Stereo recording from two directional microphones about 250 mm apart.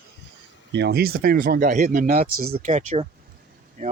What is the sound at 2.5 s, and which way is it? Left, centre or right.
Speech, right.